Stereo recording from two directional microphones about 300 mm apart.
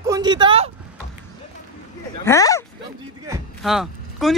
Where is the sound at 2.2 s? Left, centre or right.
Centre.